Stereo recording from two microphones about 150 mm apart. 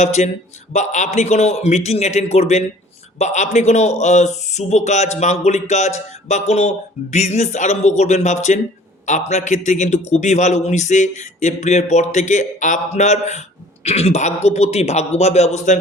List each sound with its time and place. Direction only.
0.0 s speech: 50° left (ahead or behind)